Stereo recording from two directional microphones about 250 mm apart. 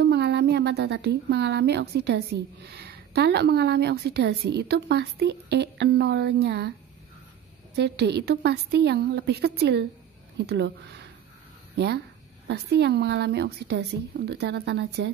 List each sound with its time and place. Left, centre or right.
0.0 s speech: right
7.7 s a woman's voice: right